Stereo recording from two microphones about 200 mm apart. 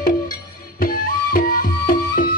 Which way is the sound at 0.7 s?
45° left (ahead or behind).